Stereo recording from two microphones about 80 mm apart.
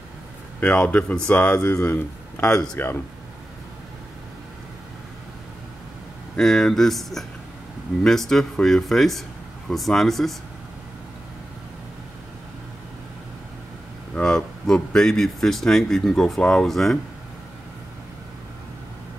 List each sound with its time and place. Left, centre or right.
0.6 s speech: centre
6.3 s speech: centre
14.1 s speech: centre